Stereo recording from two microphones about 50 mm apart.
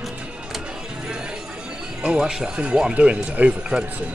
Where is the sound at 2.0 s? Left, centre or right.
Centre.